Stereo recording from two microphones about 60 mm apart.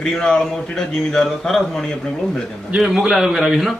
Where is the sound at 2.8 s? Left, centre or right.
Centre.